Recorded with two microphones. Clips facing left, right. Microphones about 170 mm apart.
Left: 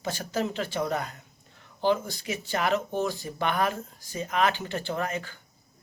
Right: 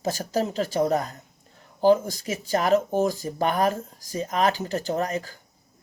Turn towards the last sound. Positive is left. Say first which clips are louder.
# right 4 dB
turn(degrees=-40)  # may be behind; listen again after turning